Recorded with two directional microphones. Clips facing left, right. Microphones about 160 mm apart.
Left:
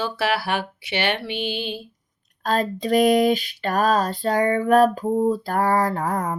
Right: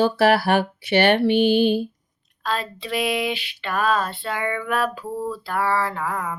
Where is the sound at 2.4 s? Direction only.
45° left (ahead or behind).